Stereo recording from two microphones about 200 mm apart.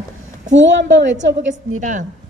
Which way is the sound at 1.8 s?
40° right (ahead or behind).